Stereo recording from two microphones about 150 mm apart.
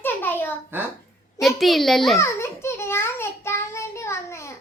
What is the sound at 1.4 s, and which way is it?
Speech, centre (ahead or behind).